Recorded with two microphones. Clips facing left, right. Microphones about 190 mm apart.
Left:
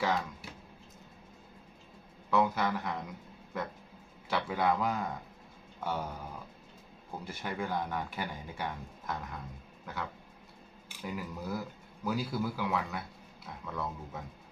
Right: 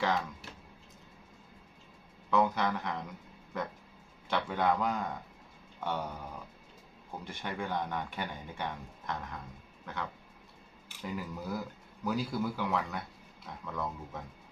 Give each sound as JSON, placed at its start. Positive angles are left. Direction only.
{"t": 0.0, "sound": "speech", "side_deg": 5}
{"t": 2.3, "sound": "speech", "side_deg": 5}
{"t": 4.3, "sound": "speech", "side_deg": 5}
{"t": 7.3, "sound": "speech", "side_deg": 5}
{"t": 9.8, "sound": "a sound", "side_deg": 5}
{"t": 11.0, "sound": "speech", "side_deg": 0}